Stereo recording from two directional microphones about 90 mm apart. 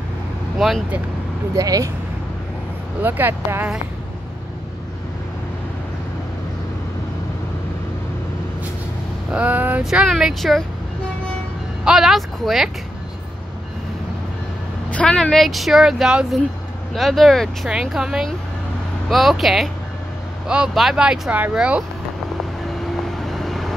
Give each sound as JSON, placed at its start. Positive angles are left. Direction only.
{"t": 0.6, "sound": "speech", "side_deg": 0}
{"t": 1.5, "sound": "speech", "side_deg": -40}
{"t": 3.0, "sound": "speech", "side_deg": -20}
{"t": 9.3, "sound": "speech", "side_deg": -15}
{"t": 9.8, "sound": "speech", "side_deg": -5}
{"t": 11.8, "sound": "speech", "side_deg": -5}
{"t": 14.9, "sound": "speech", "side_deg": 10}
{"t": 23.2, "sound": "vehicle", "side_deg": 0}